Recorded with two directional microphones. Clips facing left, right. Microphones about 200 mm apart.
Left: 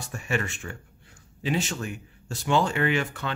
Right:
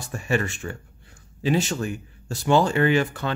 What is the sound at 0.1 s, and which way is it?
Speech, 35° right (ahead or behind).